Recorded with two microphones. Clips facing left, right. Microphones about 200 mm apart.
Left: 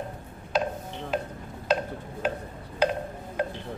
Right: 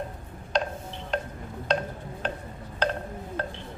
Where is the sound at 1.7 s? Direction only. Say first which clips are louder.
Left 1 dB; 5° left (ahead or behind).